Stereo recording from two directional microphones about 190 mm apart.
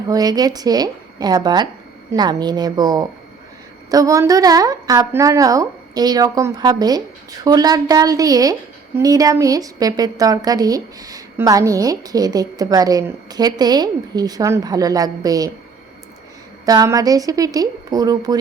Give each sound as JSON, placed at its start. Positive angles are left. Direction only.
{"t": 0.1, "sound": "a woman's voice", "side_deg": -20}
{"t": 16.6, "sound": "a woman's voice", "side_deg": -20}